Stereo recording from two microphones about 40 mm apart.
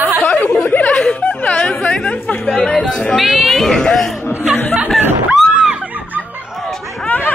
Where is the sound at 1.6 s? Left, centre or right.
Centre.